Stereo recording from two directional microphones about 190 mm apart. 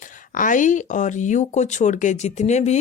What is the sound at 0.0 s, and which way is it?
Speech, 45° left (ahead or behind).